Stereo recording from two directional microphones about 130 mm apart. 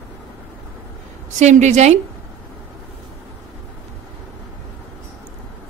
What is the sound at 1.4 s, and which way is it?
Speech, 65° right (ahead or behind).